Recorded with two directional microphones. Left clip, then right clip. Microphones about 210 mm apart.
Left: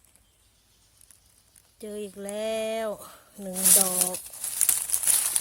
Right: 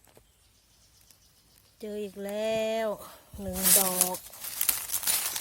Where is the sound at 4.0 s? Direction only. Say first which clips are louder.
Even; 5° right (ahead or behind).